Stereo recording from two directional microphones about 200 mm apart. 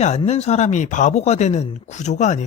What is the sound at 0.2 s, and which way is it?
A man's voice, 30° left (ahead or behind).